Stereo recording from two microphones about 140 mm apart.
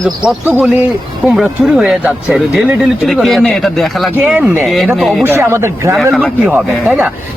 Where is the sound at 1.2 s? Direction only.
5° right (ahead or behind).